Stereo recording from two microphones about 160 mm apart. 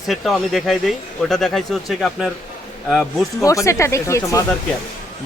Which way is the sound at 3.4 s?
20° left (ahead or behind).